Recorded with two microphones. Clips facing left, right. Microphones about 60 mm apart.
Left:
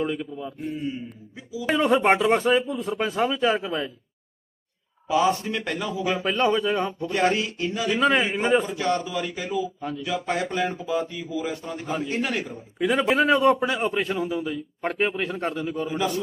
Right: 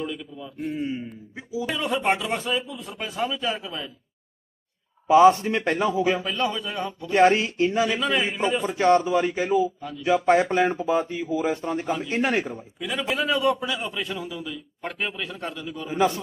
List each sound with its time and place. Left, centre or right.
0.0 s a man's voice: left
0.7 s speech: right
1.6 s a man's voice: left
5.0 s a man's voice: right
6.2 s a man's voice: left
7.1 s speech: right
7.9 s a man's voice: left
8.6 s speech: right
12.8 s a man's voice: left
15.9 s speech: right